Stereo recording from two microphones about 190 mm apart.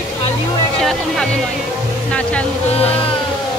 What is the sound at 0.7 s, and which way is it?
Music, 5° left (ahead or behind).